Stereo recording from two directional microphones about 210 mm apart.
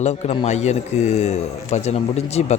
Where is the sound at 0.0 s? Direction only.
30° left (ahead or behind).